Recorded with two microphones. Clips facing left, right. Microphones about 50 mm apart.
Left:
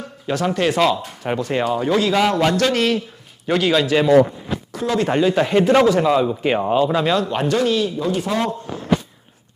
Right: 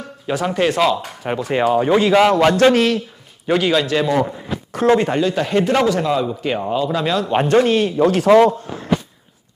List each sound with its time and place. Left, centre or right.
0.3 s a man's voice: centre; by 2.7 s right
2.7 s speech: centre; by 6.9 s left
6.9 s speech: centre
7.4 s speech: right
8.1 s speech: right